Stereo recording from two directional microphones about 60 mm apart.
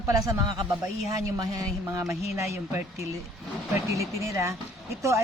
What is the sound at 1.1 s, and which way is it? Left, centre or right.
Speech, right.